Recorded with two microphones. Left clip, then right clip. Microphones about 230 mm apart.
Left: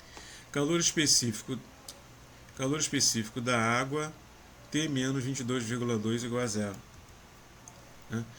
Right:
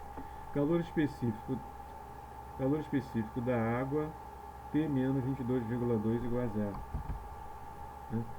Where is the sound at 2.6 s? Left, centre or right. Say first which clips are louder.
Left 4 dB; left.